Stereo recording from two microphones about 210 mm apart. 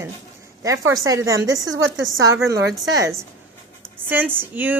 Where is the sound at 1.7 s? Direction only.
65° right (ahead or behind).